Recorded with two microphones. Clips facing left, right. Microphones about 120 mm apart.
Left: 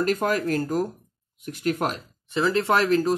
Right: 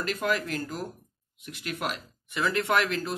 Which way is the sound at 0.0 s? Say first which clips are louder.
Left 6 dB; 45° left (ahead or behind).